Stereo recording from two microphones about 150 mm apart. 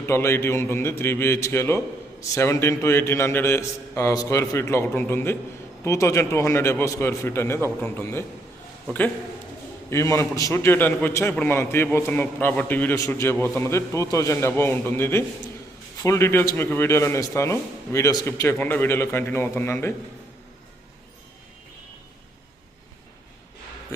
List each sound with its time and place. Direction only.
0.0 s a man's voice: 15° left (ahead or behind)
9.9 s a man's voice: 20° left (ahead or behind)